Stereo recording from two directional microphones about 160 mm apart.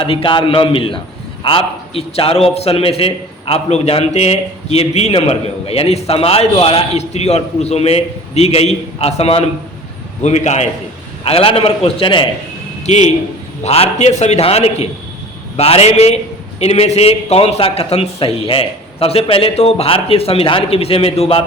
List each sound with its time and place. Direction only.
0.0 s a man's voice: 35° left (ahead or behind)